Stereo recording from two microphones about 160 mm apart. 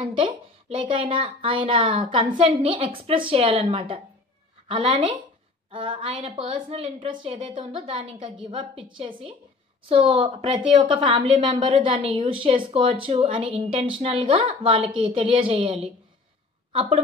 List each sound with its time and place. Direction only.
0.0 s a woman's voice: 30° right (ahead or behind)